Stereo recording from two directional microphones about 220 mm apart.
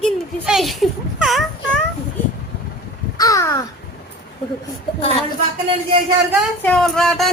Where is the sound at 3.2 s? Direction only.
15° left (ahead or behind).